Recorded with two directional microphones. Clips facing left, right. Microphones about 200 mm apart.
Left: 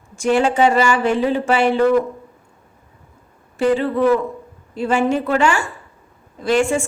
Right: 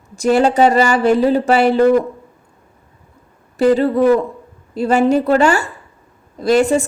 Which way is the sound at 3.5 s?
40° right (ahead or behind).